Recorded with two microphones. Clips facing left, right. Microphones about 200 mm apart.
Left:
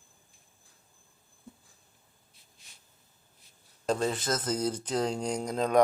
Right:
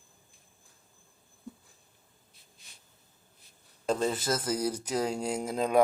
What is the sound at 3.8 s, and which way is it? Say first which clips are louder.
Speech: even; centre (ahead or behind).